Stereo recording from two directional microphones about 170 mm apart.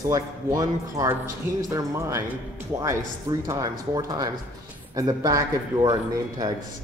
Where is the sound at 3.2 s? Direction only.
20° right (ahead or behind).